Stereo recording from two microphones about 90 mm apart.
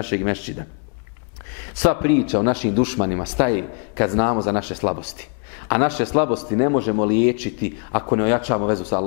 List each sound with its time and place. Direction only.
0.0 s a man's voice: 15° left (ahead or behind)
1.8 s a man's voice: 15° left (ahead or behind)